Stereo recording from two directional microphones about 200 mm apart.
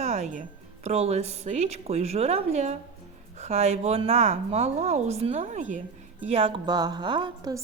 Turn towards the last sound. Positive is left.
turn(degrees=-20)  # may be behind; listen again after turning